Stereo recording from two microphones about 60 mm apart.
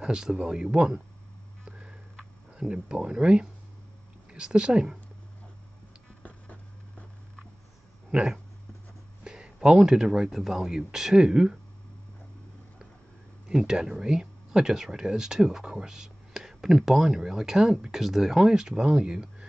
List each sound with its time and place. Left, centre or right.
0.0 s speech: centre
1.6 s a sound: centre
2.7 s speech: centre
6.2 s a sound: left
8.1 s speech: centre
13.5 s speech: centre